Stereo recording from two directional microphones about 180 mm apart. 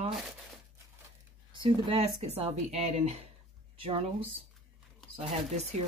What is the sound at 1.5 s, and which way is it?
Speech, 30° right (ahead or behind).